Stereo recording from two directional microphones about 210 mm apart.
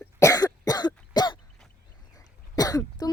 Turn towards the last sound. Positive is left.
turn(degrees=15)  # may be behind; listen again after turning